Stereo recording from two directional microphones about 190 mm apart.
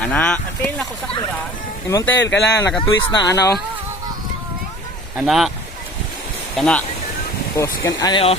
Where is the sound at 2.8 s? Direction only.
20° left (ahead or behind).